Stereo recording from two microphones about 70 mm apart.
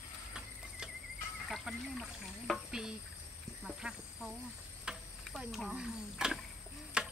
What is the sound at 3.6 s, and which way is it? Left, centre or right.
Speech, centre.